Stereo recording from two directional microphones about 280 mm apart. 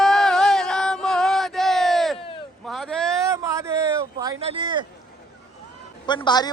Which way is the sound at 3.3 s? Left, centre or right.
Centre.